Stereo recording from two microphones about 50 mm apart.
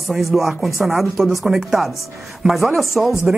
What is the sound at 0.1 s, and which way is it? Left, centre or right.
Speech, centre.